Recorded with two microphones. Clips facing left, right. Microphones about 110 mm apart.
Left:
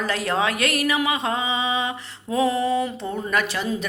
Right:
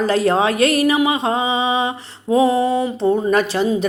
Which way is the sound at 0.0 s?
30° right (ahead or behind).